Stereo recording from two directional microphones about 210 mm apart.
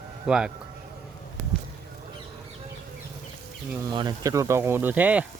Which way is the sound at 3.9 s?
20° right (ahead or behind).